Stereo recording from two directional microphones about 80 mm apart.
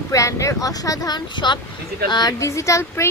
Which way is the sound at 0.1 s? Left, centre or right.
Left.